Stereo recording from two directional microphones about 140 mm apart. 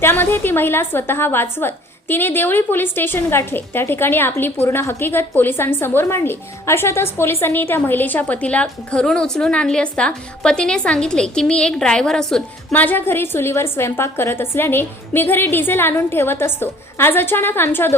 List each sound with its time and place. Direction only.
0.0 s a woman's voice: 15° left (ahead or behind)